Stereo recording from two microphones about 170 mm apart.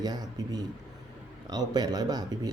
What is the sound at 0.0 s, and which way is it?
Speech, 25° right (ahead or behind).